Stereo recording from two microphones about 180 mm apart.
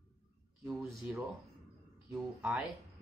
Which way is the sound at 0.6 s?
Centre (ahead or behind).